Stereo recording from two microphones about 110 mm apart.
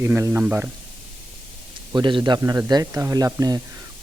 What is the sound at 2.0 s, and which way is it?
Speech, 45° right (ahead or behind).